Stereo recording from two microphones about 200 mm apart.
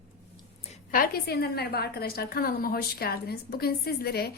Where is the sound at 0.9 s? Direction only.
45° left (ahead or behind).